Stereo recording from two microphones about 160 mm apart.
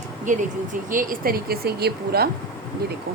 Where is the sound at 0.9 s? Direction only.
60° right (ahead or behind); by 2.3 s 85° right.